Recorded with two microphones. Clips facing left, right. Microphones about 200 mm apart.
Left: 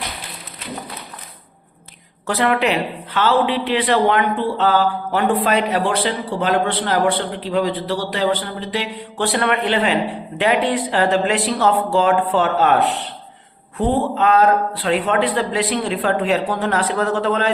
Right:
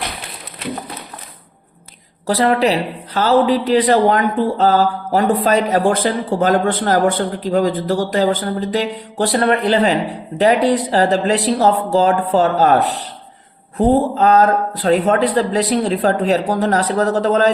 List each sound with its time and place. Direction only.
2.2 s a woman's voice: 35° right (ahead or behind)